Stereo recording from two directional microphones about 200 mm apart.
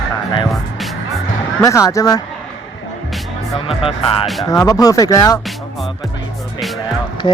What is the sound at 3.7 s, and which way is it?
Speech, 25° left (ahead or behind).